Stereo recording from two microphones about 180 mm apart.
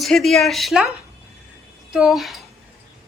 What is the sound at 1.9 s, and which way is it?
Speech, centre (ahead or behind).